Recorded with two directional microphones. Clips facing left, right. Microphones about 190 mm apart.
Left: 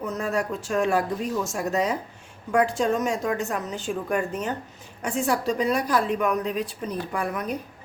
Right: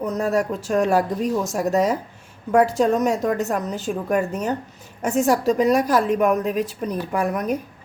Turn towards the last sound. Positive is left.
turn(degrees=-45)  # may be behind; listen again after turning